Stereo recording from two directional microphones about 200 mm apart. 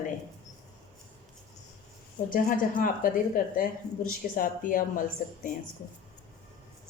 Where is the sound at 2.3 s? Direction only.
45° left (ahead or behind).